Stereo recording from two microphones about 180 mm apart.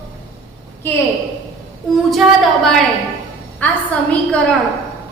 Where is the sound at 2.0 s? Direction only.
Centre (ahead or behind).